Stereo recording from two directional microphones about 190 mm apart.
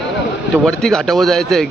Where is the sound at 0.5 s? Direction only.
Centre (ahead or behind).